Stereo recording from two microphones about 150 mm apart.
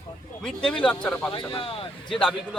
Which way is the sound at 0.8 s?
5° left (ahead or behind).